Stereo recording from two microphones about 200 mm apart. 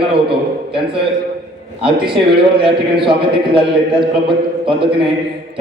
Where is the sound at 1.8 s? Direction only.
25° right (ahead or behind).